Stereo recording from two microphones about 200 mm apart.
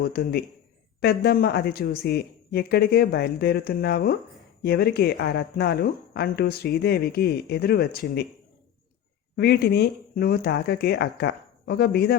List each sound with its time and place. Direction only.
0.0 s speech: 50° left (ahead or behind)
9.3 s speech: 55° left (ahead or behind)